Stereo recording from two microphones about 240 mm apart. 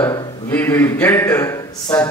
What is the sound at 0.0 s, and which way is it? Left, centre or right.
Speech, centre.